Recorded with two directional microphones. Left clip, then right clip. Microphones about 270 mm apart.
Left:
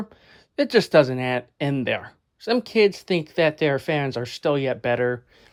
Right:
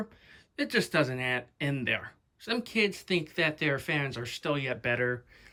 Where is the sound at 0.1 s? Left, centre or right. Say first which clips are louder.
Left 5 dB; left.